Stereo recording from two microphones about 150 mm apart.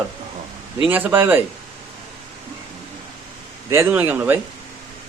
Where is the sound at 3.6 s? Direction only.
15° right (ahead or behind).